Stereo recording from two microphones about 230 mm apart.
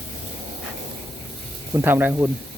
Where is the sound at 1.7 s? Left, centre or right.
Centre.